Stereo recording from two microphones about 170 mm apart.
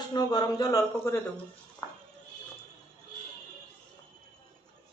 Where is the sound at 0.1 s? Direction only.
25° left (ahead or behind).